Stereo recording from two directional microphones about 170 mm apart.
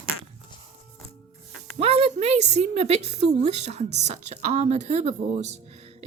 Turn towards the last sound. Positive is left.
turn(degrees=-40)  # may be behind; listen again after turning